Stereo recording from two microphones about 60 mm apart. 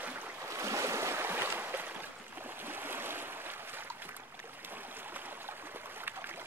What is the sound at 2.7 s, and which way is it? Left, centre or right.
Stream, right.